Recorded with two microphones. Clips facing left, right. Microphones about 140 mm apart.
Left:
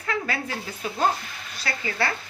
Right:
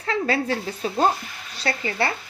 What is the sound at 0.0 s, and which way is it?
A woman's voice, 30° right (ahead or behind).